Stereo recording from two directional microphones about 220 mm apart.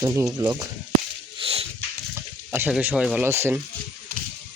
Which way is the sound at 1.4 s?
25° right (ahead or behind).